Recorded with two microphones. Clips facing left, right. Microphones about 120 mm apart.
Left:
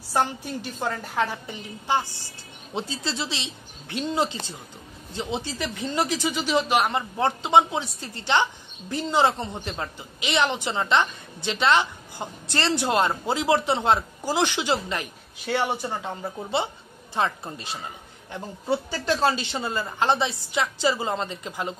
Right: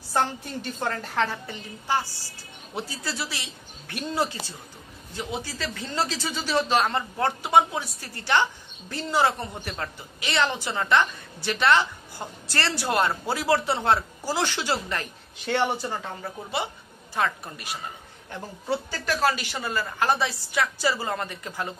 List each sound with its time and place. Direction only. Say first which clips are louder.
0.1 s a woman's voice: left 1 dB; 10° left (ahead or behind)